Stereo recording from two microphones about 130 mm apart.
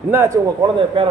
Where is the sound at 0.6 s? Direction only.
40° right (ahead or behind).